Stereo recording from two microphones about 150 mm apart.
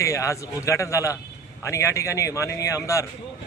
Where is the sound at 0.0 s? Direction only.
20° left (ahead or behind).